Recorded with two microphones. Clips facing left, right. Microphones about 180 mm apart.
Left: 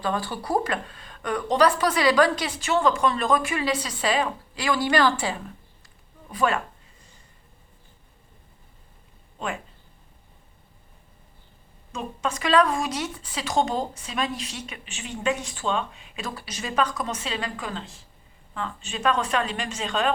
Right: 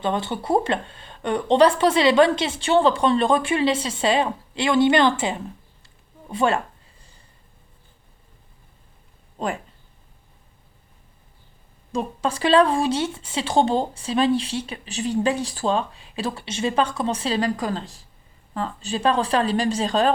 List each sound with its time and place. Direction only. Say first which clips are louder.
0.0 s speech: right 3 dB; 25° right (ahead or behind)
5.8 s a sound: right 4 dB; 25° right (ahead or behind)
11.9 s speech: right 5 dB; 35° right (ahead or behind)